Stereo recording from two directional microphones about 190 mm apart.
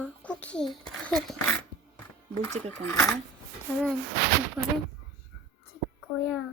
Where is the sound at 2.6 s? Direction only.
5° left (ahead or behind).